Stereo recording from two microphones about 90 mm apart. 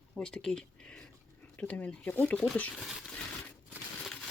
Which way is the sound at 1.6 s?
20° left (ahead or behind).